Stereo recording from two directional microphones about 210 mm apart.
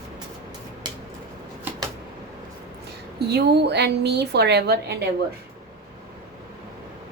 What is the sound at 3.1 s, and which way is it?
A woman's voice, 50° right (ahead or behind).